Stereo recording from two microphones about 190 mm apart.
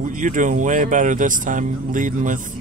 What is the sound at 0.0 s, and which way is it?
Speech, 45° right (ahead or behind).